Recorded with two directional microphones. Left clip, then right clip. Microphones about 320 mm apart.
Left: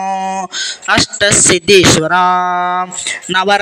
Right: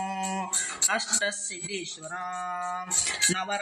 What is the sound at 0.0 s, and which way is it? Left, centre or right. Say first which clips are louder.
Speech: left 14 dB; left.